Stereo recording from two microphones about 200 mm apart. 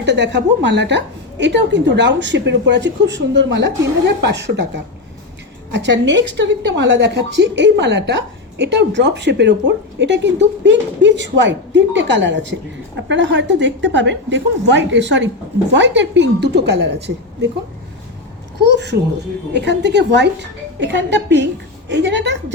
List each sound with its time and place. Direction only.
0.0 s speech: 60° right (ahead or behind)
18.6 s speech: 60° right (ahead or behind)